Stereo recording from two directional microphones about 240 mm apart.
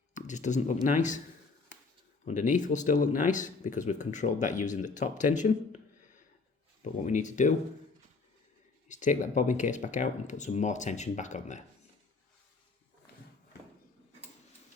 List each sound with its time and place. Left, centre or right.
0.1 s speech: left
2.2 s speech: left
7.0 s speech: left
8.9 s speech: left